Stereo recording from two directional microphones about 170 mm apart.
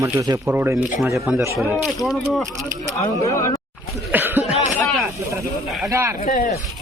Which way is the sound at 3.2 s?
20° left (ahead or behind).